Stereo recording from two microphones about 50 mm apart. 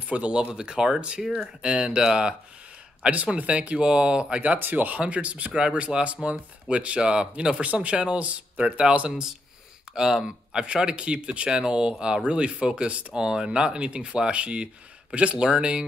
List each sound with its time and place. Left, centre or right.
0.1 s speech: right
1.6 s speech: right
3.0 s speech: right
4.6 s speech: right
9.9 s speech: centre